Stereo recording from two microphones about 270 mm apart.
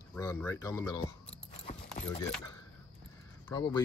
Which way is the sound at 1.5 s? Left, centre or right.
Left.